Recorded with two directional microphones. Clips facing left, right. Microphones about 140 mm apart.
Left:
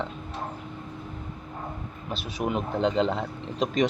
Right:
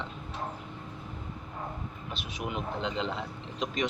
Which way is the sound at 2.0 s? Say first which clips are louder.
Left 8 dB; 40° left (ahead or behind).